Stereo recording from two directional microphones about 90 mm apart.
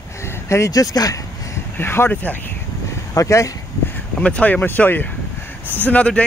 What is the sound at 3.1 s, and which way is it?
Speech, 35° left (ahead or behind).